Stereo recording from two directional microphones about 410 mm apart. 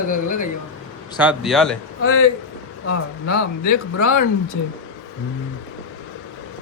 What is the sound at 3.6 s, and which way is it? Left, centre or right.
Speech, left.